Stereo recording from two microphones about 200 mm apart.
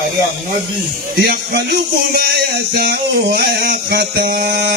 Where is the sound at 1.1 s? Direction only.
55° right (ahead or behind).